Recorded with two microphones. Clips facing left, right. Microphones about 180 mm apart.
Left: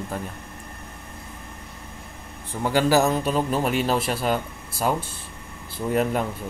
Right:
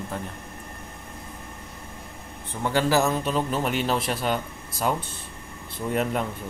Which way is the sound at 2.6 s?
10° left (ahead or behind).